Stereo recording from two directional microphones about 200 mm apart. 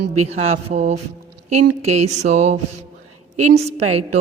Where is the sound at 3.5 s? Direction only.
35° right (ahead or behind).